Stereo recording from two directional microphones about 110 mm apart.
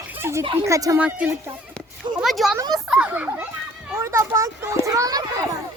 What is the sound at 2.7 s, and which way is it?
Speech, 5° right (ahead or behind).